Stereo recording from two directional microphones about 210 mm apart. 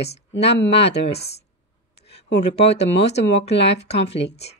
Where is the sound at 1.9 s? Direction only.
50° left (ahead or behind).